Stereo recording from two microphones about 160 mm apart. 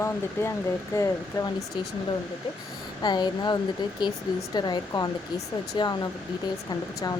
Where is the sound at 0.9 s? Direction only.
20° left (ahead or behind).